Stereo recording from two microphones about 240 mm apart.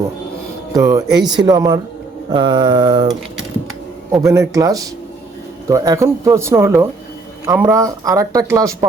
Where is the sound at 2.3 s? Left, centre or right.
Centre.